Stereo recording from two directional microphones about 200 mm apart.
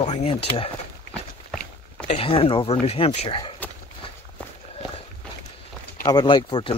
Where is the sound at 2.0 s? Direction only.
30° left (ahead or behind).